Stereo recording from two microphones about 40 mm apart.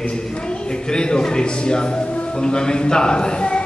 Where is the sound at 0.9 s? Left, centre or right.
Left.